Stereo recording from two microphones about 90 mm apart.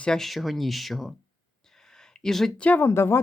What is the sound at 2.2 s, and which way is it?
Speech, 5° left (ahead or behind).